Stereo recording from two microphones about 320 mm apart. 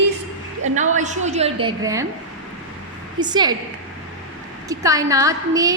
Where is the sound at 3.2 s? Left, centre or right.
Centre.